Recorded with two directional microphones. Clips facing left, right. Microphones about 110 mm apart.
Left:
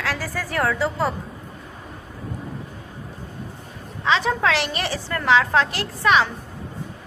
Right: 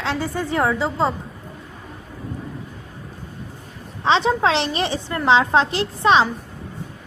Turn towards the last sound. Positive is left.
turn(degrees=-25)  # may be behind; listen again after turning